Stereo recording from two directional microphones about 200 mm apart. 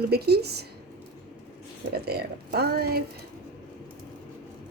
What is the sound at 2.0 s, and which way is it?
Speech, 55° right (ahead or behind).